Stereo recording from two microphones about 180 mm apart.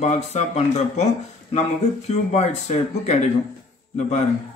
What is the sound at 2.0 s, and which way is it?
Speech, 35° left (ahead or behind).